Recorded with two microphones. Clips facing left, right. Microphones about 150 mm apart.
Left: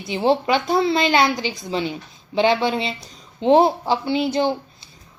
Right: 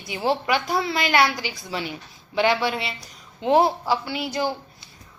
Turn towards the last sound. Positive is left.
turn(degrees=25)  # may be behind; listen again after turning